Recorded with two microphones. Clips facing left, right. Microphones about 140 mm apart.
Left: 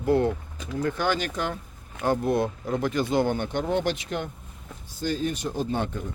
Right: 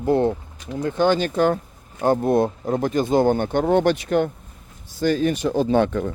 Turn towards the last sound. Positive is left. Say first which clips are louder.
# right 10 dB
turn(degrees=-90)